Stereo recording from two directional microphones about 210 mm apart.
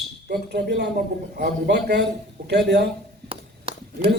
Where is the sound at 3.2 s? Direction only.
25° right (ahead or behind).